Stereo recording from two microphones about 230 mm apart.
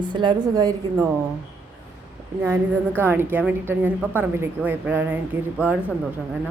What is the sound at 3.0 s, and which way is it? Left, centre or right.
Speech, centre.